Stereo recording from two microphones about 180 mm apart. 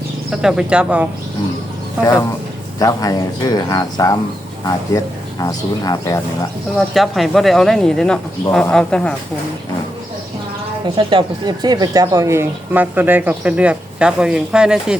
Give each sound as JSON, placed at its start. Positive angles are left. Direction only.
{"t": 0.3, "sound": "speech", "side_deg": -5}
{"t": 2.7, "sound": "speech", "side_deg": 20}
{"t": 6.7, "sound": "speech", "side_deg": 0}
{"t": 10.9, "sound": "speech", "side_deg": -25}